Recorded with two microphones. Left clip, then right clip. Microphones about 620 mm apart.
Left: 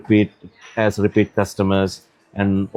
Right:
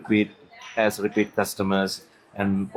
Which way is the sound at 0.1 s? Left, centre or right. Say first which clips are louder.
Left 6 dB; left.